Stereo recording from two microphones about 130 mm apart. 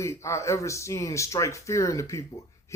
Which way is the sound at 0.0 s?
20° left (ahead or behind).